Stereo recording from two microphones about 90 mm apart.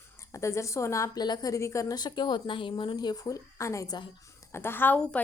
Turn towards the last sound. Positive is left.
turn(degrees=20)  # may be behind; listen again after turning